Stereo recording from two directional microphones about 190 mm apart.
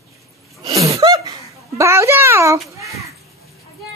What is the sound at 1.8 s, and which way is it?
Speech, 15° right (ahead or behind).